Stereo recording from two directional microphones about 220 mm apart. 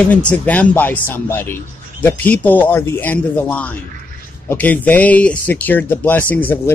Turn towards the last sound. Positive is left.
turn(degrees=10)  # may be behind; listen again after turning